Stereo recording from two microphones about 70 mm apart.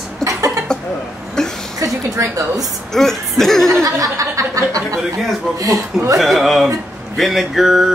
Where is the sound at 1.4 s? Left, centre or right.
Centre.